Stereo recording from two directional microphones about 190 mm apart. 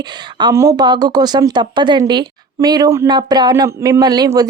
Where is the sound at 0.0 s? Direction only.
20° right (ahead or behind).